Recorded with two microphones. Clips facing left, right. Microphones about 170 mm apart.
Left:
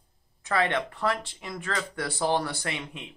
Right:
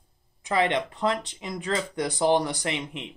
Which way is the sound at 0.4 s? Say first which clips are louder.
Right 2 dB; 15° right (ahead or behind).